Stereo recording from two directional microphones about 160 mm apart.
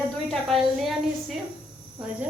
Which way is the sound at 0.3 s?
Centre (ahead or behind).